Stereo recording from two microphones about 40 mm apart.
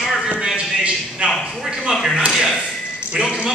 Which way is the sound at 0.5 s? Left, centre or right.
Right.